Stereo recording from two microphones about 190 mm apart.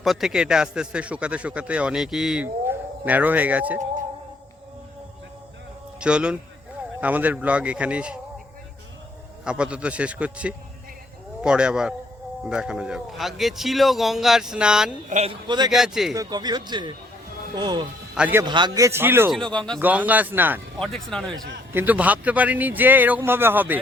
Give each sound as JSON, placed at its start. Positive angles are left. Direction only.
{"t": 0.0, "sound": "a man's voice", "side_deg": 0}
{"t": 6.0, "sound": "speech", "side_deg": -5}
{"t": 9.4, "sound": "a man's voice", "side_deg": -5}
{"t": 15.1, "sound": "speech", "side_deg": -30}
{"t": 15.7, "sound": "a man's voice", "side_deg": 0}
{"t": 16.1, "sound": "speech", "side_deg": -20}
{"t": 18.1, "sound": "speech", "side_deg": -10}
{"t": 18.4, "sound": "speech", "side_deg": -25}
{"t": 19.3, "sound": "a man's voice", "side_deg": 5}
{"t": 19.8, "sound": "speech", "side_deg": -10}
{"t": 20.7, "sound": "a man's voice", "side_deg": 0}
{"t": 21.7, "sound": "speech", "side_deg": -10}